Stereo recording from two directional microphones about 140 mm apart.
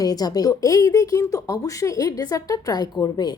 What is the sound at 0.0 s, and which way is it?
Speech, 25° left (ahead or behind).